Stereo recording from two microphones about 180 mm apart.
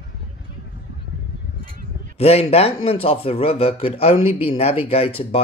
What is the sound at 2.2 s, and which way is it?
A man's voice, 35° left (ahead or behind).